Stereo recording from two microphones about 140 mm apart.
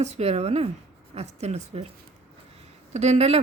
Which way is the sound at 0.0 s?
50° right (ahead or behind).